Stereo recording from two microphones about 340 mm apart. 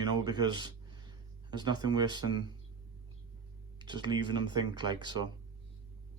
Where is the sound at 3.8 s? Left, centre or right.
Centre.